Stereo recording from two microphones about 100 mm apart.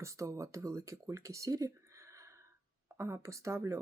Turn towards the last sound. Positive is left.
turn(degrees=-30)  # may be behind; listen again after turning